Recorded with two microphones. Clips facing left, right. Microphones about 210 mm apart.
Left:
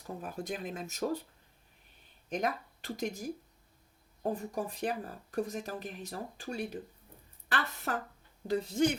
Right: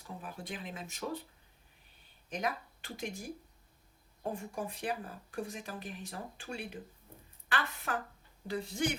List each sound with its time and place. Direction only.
0.2 s speech: 45° left (ahead or behind)
2.4 s a woman's voice: 40° left (ahead or behind)